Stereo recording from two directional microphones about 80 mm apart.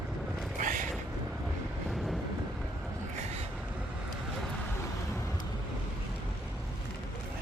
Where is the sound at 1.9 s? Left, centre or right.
Centre.